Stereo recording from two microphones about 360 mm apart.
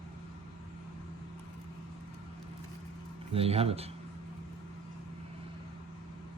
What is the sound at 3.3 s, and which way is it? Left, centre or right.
Speech, centre.